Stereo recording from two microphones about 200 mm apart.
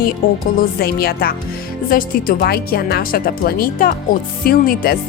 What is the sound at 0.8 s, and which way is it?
Speech, 50° left (ahead or behind).